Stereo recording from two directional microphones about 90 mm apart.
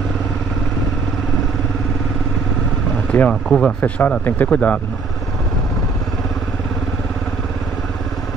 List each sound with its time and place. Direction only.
3.1 s speech: 15° left (ahead or behind)
3.8 s speech: 20° left (ahead or behind)